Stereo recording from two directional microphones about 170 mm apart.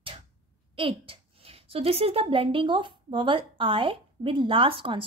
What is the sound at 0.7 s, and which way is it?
A woman's voice, 30° right (ahead or behind).